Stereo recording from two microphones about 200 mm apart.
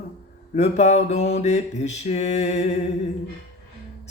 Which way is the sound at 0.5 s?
35° left (ahead or behind).